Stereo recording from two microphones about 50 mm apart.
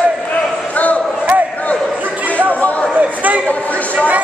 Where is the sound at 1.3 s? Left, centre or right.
Right.